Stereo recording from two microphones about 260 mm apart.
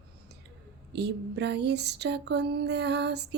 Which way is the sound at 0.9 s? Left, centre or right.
Right.